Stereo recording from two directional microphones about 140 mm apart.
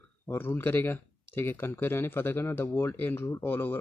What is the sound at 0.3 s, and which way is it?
Speech, 15° left (ahead or behind).